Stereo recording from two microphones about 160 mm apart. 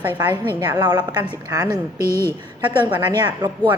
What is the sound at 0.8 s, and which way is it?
A woman's voice, 25° right (ahead or behind).